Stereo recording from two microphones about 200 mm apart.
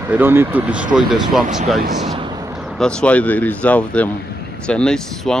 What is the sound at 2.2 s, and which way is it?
Artillery fire, 20° right (ahead or behind).